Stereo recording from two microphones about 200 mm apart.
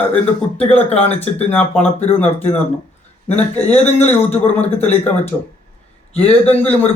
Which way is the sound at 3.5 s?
5° left (ahead or behind).